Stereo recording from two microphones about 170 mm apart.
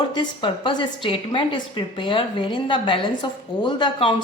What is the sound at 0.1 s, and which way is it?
A woman's voice, 25° left (ahead or behind).